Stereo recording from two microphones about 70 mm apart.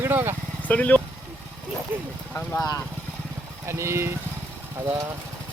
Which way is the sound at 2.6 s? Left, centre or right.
Left.